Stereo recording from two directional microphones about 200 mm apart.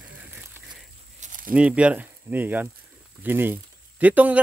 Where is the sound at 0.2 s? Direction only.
5° right (ahead or behind).